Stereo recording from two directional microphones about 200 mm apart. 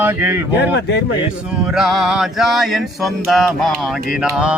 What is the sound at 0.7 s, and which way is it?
Speech, 60° left (ahead or behind).